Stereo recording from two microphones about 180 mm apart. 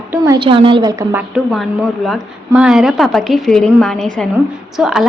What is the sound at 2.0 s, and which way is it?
Speech, 5° right (ahead or behind).